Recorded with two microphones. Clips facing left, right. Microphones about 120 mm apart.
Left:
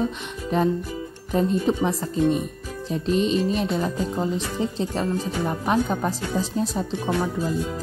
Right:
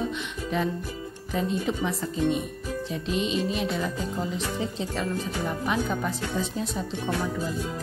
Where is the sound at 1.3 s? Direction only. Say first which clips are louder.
Left 6 dB; 40° left (ahead or behind).